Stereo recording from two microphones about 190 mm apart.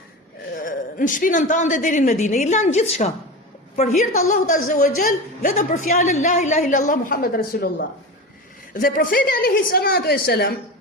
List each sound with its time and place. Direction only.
0.5 s a man's voice: 45° left (ahead or behind)